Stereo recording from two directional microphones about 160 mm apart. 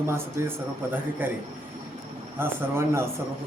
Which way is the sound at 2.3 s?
15° right (ahead or behind).